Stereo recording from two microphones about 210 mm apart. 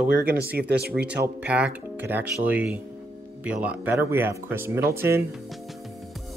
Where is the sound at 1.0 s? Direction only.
5° right (ahead or behind).